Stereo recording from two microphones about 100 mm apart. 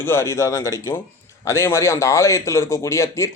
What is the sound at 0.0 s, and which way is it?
A man's voice, 25° left (ahead or behind).